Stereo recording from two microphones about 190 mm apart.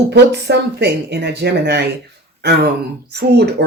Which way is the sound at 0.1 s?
60° right (ahead or behind).